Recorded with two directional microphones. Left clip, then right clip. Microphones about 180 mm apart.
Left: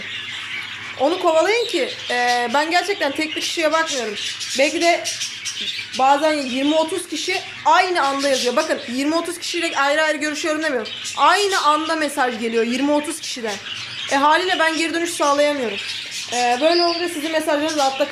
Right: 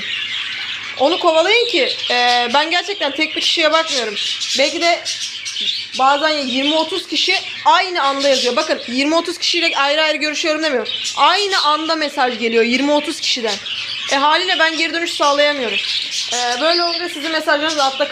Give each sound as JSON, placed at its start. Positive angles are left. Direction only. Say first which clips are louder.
{"t": 1.0, "sound": "speech", "louder": "right 3 dB", "side_deg": 10}
{"t": 6.0, "sound": "speech", "louder": "right 1 dB", "side_deg": 15}
{"t": 6.6, "sound": "speech", "louder": "right 2 dB", "side_deg": 0}
{"t": 7.2, "sound": "speech", "louder": "right 10 dB", "side_deg": 15}
{"t": 8.2, "sound": "speech", "louder": "right 3 dB", "side_deg": 0}
{"t": 16.3, "sound": "speech", "louder": "even", "side_deg": 15}